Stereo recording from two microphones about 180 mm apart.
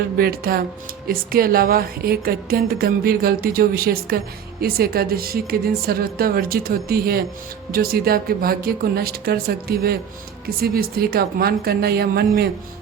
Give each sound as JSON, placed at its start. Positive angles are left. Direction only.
{"t": 0.2, "sound": "a woman's voice", "side_deg": -55}